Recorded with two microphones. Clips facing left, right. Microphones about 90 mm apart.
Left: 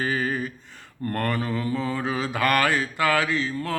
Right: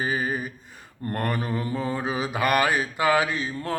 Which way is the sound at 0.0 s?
15° right (ahead or behind).